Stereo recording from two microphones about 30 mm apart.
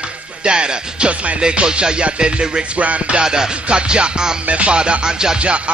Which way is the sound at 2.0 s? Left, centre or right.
Right.